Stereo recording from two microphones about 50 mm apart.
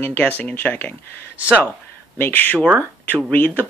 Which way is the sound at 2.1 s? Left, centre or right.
Left.